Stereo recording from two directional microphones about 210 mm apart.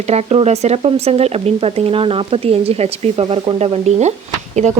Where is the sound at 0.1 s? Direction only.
30° right (ahead or behind).